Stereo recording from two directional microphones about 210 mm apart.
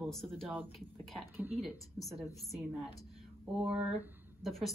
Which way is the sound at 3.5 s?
5° right (ahead or behind).